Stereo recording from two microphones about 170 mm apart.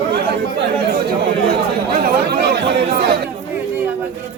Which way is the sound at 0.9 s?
65° right (ahead or behind).